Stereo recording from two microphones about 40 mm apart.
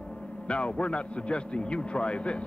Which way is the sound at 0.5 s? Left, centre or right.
Left.